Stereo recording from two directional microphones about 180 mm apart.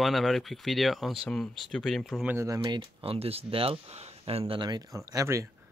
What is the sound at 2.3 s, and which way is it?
Speech, 20° right (ahead or behind).